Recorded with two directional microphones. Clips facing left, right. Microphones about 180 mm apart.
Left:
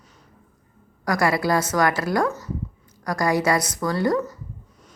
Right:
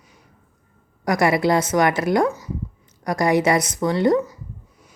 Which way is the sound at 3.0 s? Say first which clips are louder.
Right 3 dB; 20° right (ahead or behind).